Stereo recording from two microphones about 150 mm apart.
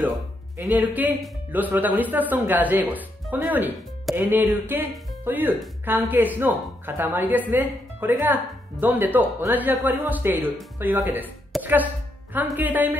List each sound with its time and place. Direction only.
0.6 s speech: 10° right (ahead or behind)